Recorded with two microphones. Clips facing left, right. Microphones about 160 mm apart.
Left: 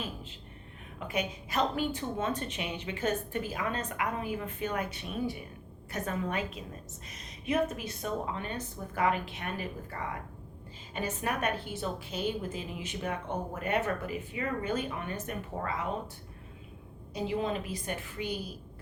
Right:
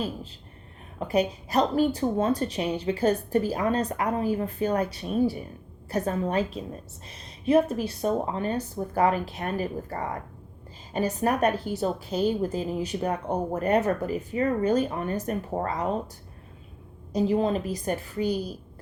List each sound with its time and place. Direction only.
0.9 s a woman's voice: 35° right (ahead or behind)
17.1 s a woman's voice: 40° right (ahead or behind)